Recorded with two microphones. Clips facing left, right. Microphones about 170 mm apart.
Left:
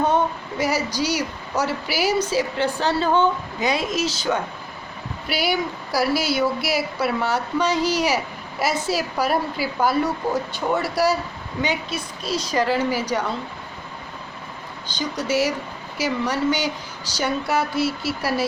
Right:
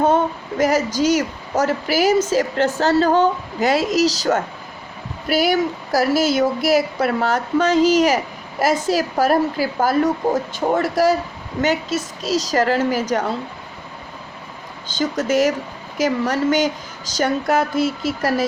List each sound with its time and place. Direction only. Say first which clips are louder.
0.8 s speech: right 4 dB; 10° left (ahead or behind)
1.0 s a woman's voice: right 6 dB; 50° right (ahead or behind)
7.8 s speech: right 8 dB; 10° left (ahead or behind)
8.0 s a woman's voice: right 4 dB; 50° right (ahead or behind)
15.3 s a woman's voice: right 3 dB; 50° right (ahead or behind)